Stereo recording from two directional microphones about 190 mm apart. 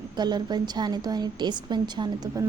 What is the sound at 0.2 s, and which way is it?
A woman's voice, 20° right (ahead or behind).